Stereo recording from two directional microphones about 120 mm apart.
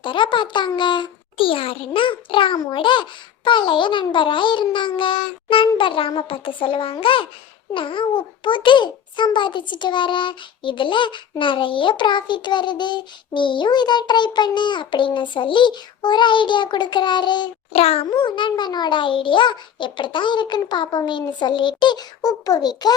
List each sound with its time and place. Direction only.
0.0 s a child's voice: 45° left (ahead or behind)
17.7 s a child's voice: 55° left (ahead or behind)
18.1 s a child's voice: 40° left (ahead or behind)